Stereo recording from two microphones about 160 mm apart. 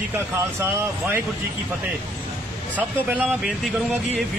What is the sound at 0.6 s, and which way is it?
Speech, 15° right (ahead or behind).